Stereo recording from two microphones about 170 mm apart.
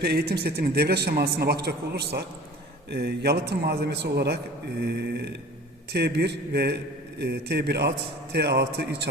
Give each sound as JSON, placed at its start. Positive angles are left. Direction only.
{"t": 0.0, "sound": "a man's voice", "side_deg": -70}